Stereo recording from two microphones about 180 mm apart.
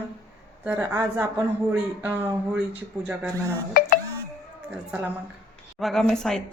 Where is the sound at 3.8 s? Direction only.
50° left (ahead or behind).